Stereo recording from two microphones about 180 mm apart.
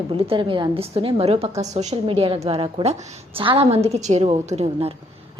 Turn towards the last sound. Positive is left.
turn(degrees=-35)  # may be behind; listen again after turning